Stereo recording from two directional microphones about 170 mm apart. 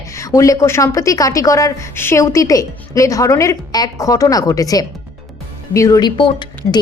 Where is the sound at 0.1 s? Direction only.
20° left (ahead or behind).